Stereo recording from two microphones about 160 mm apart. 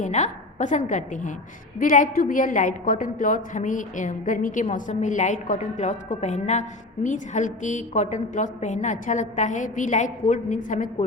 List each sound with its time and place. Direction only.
0.0 s a woman's voice: 50° left (ahead or behind)